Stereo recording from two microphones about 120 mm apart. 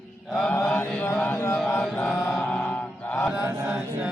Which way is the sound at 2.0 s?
15° left (ahead or behind).